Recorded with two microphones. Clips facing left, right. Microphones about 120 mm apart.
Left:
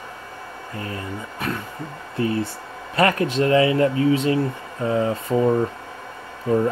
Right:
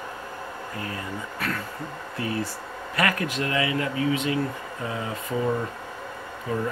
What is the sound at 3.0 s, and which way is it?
Speech, 30° left (ahead or behind).